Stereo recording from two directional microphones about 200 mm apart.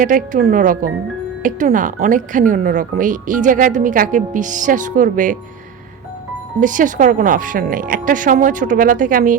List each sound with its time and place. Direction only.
0.0 s speech: 40° right (ahead or behind)
6.6 s speech: 40° right (ahead or behind)